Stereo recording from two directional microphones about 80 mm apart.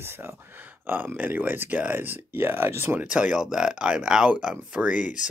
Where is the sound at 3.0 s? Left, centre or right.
Centre.